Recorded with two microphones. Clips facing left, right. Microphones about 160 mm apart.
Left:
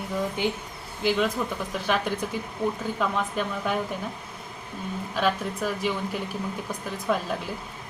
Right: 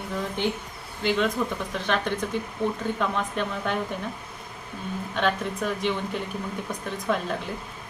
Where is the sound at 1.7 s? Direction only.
5° left (ahead or behind).